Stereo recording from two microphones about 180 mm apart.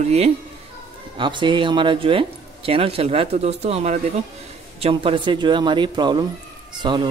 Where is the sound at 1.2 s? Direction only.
25° right (ahead or behind).